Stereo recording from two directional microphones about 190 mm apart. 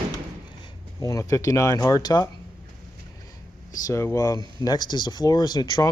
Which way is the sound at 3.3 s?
15° left (ahead or behind).